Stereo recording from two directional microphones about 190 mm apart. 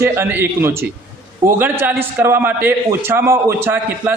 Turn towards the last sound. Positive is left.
turn(degrees=-10)  # may be behind; listen again after turning